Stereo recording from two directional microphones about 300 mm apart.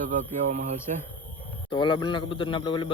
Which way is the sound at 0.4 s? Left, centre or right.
Right.